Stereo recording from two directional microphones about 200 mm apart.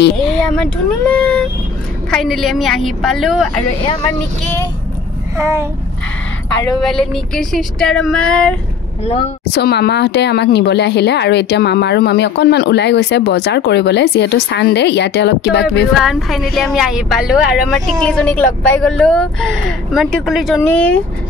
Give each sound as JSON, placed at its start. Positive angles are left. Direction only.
{"t": 0.4, "sound": "a woman's voice", "side_deg": 5}
{"t": 5.4, "sound": "speech", "side_deg": -15}
{"t": 6.8, "sound": "a woman's voice", "side_deg": 5}
{"t": 9.5, "sound": "speech", "side_deg": 55}
{"t": 15.9, "sound": "a woman's voice", "side_deg": 0}